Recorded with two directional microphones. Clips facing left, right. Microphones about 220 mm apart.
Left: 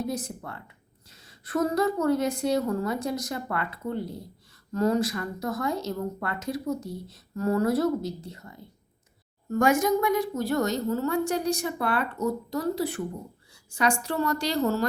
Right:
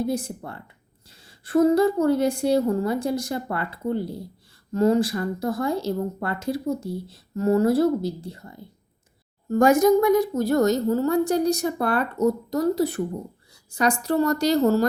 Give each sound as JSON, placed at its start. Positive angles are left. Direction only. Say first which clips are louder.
{"t": 0.0, "sound": "speech", "louder": "right 5 dB", "side_deg": -30}